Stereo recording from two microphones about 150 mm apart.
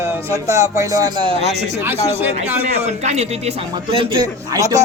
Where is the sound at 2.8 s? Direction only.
50° right (ahead or behind).